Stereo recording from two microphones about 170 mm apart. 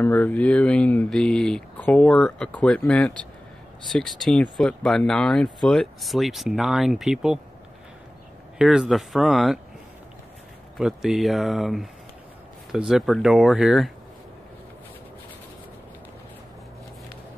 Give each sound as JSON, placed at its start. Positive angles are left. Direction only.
{"t": 0.0, "sound": "speech", "side_deg": 10}
{"t": 8.5, "sound": "speech", "side_deg": -5}
{"t": 10.8, "sound": "speech", "side_deg": 0}